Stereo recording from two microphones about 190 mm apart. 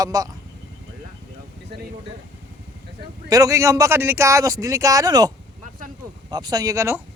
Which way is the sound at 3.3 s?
15° right (ahead or behind).